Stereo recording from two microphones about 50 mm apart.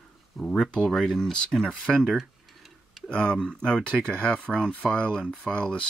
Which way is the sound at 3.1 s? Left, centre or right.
Centre.